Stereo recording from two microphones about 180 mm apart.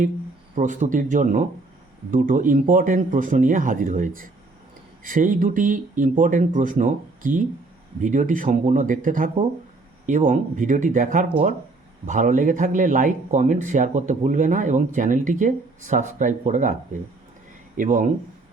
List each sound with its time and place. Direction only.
0.5 s speech: 45° right (ahead or behind)
17.7 s speech: 45° right (ahead or behind)